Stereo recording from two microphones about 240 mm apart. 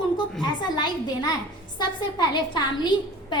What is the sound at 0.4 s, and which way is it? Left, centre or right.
A woman's voice, centre.